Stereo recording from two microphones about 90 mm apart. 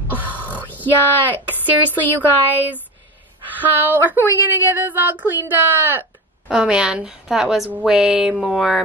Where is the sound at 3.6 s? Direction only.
20° right (ahead or behind).